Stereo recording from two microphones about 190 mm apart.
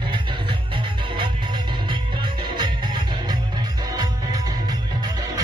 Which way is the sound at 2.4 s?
20° right (ahead or behind).